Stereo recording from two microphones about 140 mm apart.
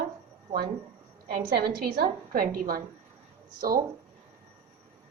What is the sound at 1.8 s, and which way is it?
A woman's voice, 90° right.